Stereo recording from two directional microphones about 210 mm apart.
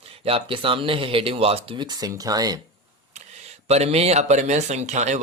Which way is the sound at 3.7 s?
30° right (ahead or behind).